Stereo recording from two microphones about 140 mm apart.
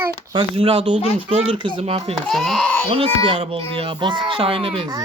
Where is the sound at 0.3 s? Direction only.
40° right (ahead or behind).